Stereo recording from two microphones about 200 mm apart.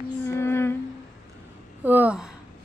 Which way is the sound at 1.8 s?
10° right (ahead or behind).